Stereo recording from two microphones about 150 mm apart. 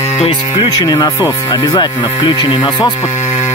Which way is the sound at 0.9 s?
20° left (ahead or behind).